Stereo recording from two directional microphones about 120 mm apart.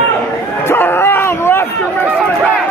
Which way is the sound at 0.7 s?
20° left (ahead or behind).